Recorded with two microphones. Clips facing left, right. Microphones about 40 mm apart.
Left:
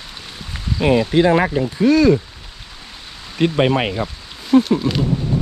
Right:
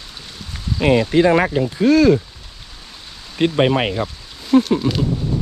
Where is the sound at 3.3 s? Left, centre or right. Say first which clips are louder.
Even; centre.